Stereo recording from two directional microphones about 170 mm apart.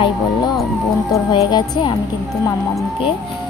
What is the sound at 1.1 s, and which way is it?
Speech, 25° left (ahead or behind).